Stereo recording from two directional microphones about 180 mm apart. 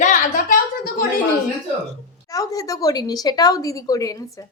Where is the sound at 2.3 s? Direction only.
20° left (ahead or behind).